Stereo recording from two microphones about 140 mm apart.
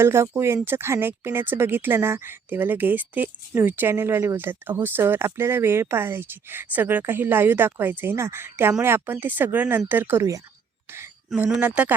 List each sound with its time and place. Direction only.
0.0 s speech: 20° right (ahead or behind)
11.3 s speech: 5° right (ahead or behind)